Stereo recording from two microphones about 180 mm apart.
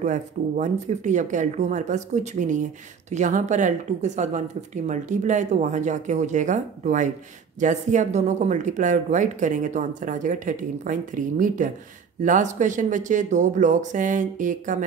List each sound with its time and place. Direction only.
0.0 s speech: 40° right (ahead or behind)